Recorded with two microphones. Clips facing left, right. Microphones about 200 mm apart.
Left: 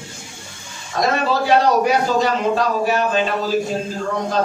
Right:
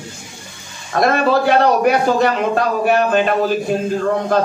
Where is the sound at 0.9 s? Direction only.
55° right (ahead or behind).